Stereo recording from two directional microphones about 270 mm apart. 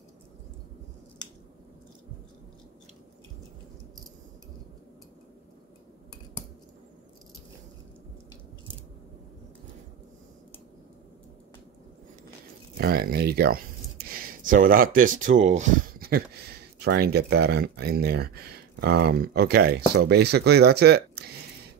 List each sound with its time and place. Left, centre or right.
12.7 s speech: right